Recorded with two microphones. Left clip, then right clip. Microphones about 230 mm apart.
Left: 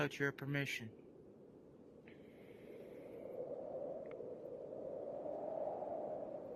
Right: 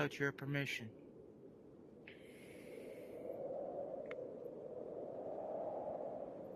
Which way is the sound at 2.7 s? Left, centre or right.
Right.